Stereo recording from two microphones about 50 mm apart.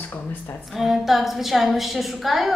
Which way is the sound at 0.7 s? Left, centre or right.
Centre.